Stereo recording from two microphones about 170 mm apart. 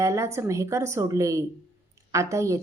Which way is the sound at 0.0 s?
15° right (ahead or behind).